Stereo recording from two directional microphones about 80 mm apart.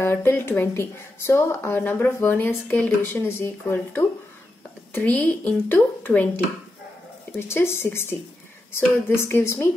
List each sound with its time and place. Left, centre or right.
0.0 s a woman's voice: left